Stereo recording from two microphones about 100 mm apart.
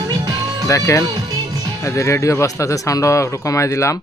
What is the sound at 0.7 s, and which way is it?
Speech, 30° left (ahead or behind).